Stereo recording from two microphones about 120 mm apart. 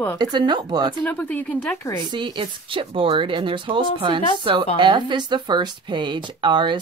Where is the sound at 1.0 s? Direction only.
10° left (ahead or behind).